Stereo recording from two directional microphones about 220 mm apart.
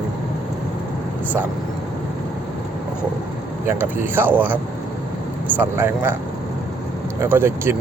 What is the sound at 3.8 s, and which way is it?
Speech, 10° right (ahead or behind).